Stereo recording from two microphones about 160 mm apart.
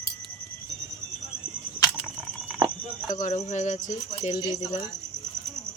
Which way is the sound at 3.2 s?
45° left (ahead or behind).